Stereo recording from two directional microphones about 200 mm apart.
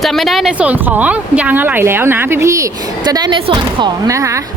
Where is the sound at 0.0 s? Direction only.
Centre (ahead or behind).